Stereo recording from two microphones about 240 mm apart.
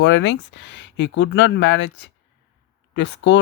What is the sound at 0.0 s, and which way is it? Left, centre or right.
Speech, left.